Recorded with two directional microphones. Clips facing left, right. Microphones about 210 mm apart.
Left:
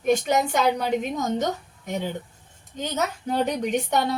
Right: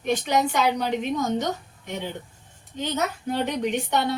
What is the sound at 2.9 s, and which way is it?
Speech, 40° left (ahead or behind).